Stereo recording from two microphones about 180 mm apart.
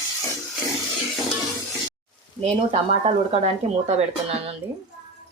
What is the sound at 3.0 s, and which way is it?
Speech, 35° right (ahead or behind).